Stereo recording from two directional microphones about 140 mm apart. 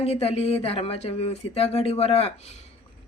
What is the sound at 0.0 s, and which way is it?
Speech, 45° left (ahead or behind).